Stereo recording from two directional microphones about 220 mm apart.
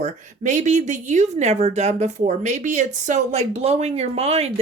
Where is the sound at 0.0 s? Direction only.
35° right (ahead or behind).